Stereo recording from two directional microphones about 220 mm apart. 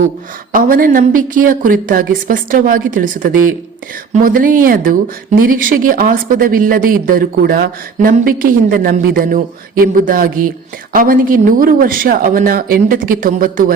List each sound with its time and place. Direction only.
0.5 s speech: 40° right (ahead or behind)